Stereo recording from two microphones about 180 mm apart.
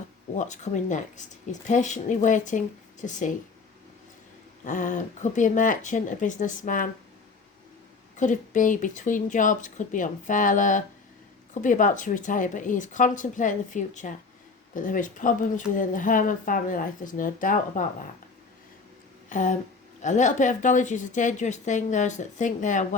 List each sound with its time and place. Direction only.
0.3 s a woman's voice: 45° left (ahead or behind)
4.6 s a woman's voice: 45° left (ahead or behind)
8.1 s a woman's voice: 45° left (ahead or behind)
19.3 s a woman's voice: 45° left (ahead or behind)